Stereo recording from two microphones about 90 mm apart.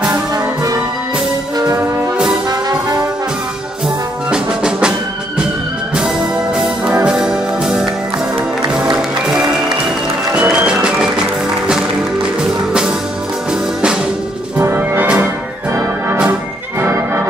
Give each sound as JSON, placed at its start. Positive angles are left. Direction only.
{"t": 4.3, "sound": "music", "side_deg": -10}
{"t": 5.9, "sound": "brass instrument", "side_deg": -5}
{"t": 7.1, "sound": "music", "side_deg": -5}
{"t": 10.3, "sound": "music", "side_deg": -10}
{"t": 14.6, "sound": "music", "side_deg": -25}
{"t": 16.8, "sound": "music", "side_deg": -30}